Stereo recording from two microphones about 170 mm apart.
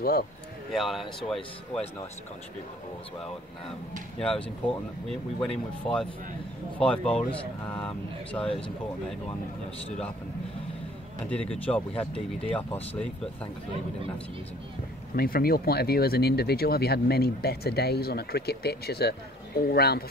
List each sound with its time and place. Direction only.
0.7 s speech: centre (ahead or behind)
4.2 s speech: 5° left (ahead or behind)
11.2 s speech: 5° left (ahead or behind)
15.1 s speech: 60° left (ahead or behind)